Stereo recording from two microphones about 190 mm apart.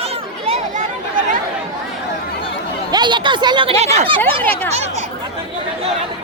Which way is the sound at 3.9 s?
25° right (ahead or behind).